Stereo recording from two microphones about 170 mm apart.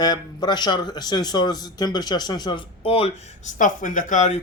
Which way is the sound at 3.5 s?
50° left (ahead or behind).